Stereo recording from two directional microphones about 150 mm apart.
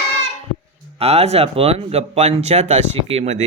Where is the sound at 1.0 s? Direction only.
45° right (ahead or behind).